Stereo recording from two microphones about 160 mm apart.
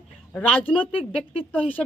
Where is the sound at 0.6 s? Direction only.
35° left (ahead or behind).